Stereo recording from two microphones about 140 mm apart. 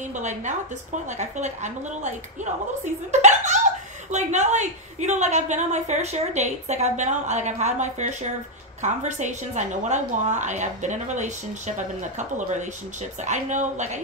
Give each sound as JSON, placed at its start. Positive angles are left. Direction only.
{"t": 0.0, "sound": "a woman's voice", "side_deg": -60}